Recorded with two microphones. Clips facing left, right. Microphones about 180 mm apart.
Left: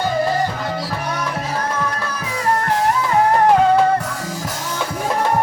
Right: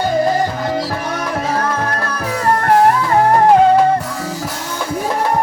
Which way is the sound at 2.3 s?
55° right (ahead or behind).